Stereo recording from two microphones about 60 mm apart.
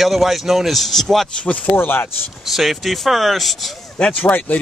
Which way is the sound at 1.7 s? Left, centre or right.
Left.